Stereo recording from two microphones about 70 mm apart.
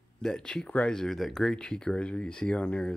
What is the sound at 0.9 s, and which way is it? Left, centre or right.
Speech, centre.